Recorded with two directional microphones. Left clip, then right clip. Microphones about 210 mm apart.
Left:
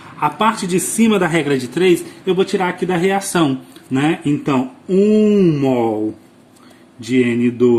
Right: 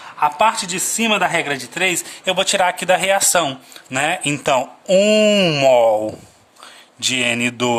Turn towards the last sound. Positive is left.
turn(degrees=-45)  # may be behind; listen again after turning